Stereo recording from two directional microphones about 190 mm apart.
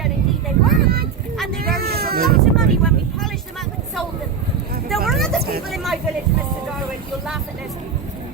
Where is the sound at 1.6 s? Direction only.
55° right (ahead or behind).